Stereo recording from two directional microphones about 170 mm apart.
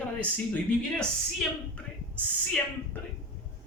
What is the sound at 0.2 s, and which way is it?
Speech, 5° left (ahead or behind).